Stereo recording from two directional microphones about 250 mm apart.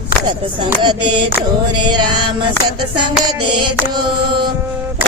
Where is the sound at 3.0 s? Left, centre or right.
Centre.